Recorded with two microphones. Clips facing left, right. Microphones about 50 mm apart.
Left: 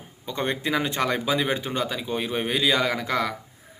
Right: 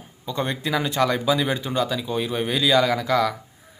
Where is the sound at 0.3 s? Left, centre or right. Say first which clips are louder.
Right 1 dB; left.